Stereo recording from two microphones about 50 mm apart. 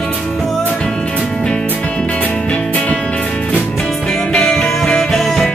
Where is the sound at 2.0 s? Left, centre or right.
Left.